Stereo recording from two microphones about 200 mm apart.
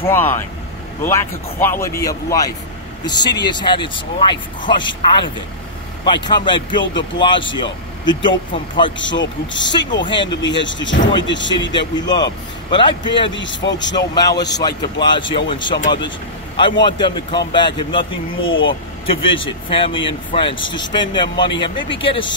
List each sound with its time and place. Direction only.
0.1 s speech: 10° left (ahead or behind)
8.9 s speech: 65° left (ahead or behind)
9.7 s speech: 20° left (ahead or behind)
10.4 s speech: 65° left (ahead or behind)
11.7 s speech: 20° left (ahead or behind)
13.3 s speech: 65° left (ahead or behind)
13.9 s speech: 20° left (ahead or behind)
16.8 s speech: 20° left (ahead or behind)